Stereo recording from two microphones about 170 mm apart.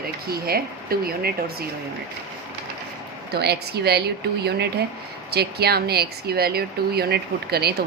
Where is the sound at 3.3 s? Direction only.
70° right (ahead or behind).